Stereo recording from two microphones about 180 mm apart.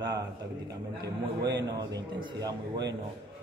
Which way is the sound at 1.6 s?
25° right (ahead or behind).